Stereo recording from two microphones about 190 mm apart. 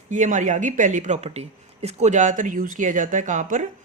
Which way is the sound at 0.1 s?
40° right (ahead or behind).